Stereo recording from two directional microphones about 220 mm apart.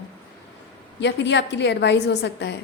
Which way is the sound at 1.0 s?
55° left (ahead or behind).